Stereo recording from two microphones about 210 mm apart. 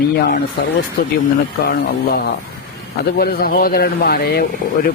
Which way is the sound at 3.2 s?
45° left (ahead or behind).